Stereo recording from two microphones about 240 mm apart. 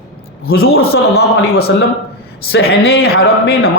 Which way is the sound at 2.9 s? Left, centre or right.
Left.